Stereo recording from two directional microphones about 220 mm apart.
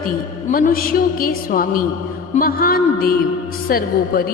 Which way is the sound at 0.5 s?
40° left (ahead or behind).